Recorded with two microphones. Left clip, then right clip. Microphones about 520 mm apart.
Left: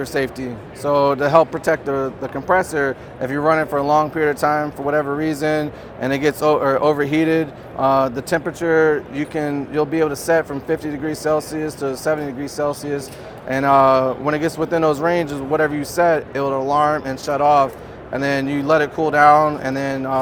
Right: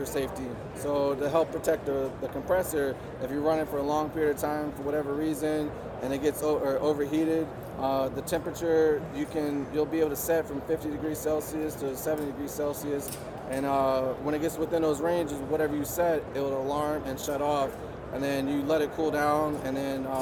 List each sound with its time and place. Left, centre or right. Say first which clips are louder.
0.0 s speech: left 9 dB; left